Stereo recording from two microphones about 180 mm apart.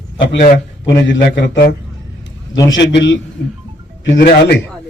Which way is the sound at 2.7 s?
80° left.